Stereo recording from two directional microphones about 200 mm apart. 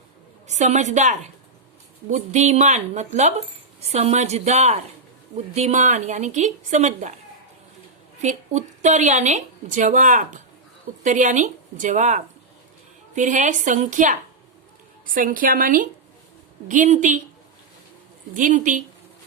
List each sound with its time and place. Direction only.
0.4 s a woman's voice: 35° right (ahead or behind)
8.2 s a woman's voice: 35° right (ahead or behind)
18.3 s a woman's voice: 40° right (ahead or behind)